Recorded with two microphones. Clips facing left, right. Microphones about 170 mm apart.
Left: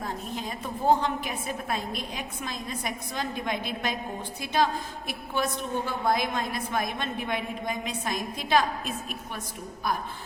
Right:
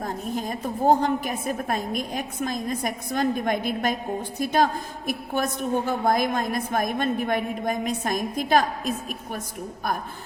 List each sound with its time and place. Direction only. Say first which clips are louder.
0.0 s a woman's voice: right 5 dB; 45° right (ahead or behind)